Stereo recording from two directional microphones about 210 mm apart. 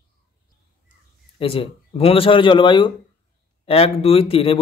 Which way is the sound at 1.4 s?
25° left (ahead or behind).